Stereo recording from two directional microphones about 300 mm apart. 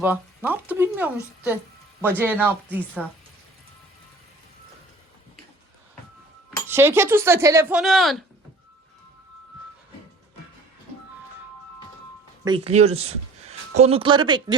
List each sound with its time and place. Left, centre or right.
0.0 s dishes: centre
6.7 s dishes: centre
12.5 s speech: centre